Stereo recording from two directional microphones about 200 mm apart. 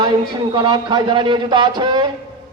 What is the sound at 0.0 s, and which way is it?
A man's voice, 20° right (ahead or behind).